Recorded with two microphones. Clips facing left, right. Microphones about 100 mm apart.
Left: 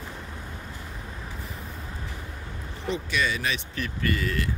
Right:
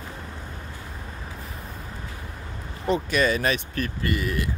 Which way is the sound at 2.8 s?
45° right (ahead or behind).